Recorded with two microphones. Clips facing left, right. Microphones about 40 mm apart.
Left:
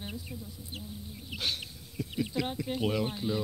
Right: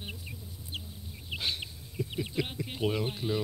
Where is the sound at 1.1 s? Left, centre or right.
Centre.